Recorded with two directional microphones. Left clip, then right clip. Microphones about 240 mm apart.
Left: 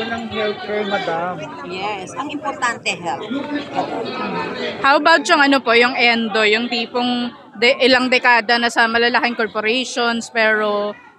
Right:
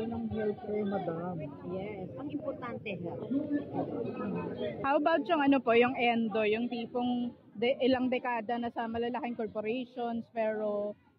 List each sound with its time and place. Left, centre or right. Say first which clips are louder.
4.8 s speech: left 16 dB; left